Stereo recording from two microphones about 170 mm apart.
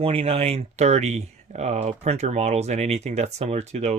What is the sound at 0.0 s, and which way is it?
Speech, 35° right (ahead or behind).